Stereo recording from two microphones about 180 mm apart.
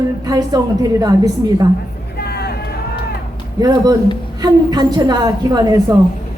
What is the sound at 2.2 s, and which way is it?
Vehicle, 65° left (ahead or behind).